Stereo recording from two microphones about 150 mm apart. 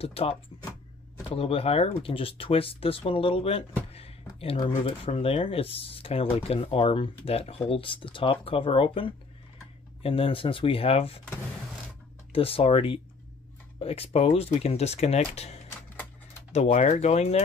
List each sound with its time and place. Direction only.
0.0 s speech: 40° left (ahead or behind)
3.9 s a sound: 40° left (ahead or behind)
4.6 s speech: 35° left (ahead or behind)
12.3 s speech: 40° left (ahead or behind)